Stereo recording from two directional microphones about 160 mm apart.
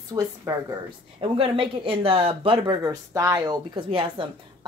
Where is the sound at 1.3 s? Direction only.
35° right (ahead or behind).